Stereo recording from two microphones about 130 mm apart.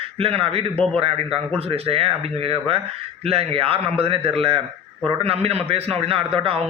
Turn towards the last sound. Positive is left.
turn(degrees=-50)  # may be behind; listen again after turning